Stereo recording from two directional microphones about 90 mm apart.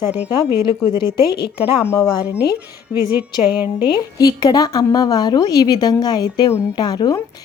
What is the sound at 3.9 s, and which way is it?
A woman's voice, 45° left (ahead or behind).